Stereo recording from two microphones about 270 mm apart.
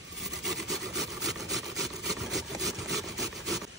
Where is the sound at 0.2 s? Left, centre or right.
Centre.